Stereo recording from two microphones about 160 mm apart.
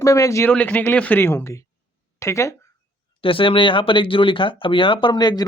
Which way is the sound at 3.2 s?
35° left (ahead or behind).